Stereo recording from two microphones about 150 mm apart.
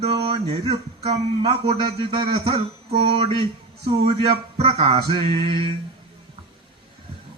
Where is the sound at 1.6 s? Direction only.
35° right (ahead or behind).